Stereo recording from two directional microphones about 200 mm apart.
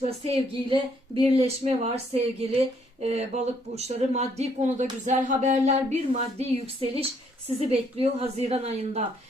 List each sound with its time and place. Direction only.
0.0 s a woman's voice: 30° right (ahead or behind)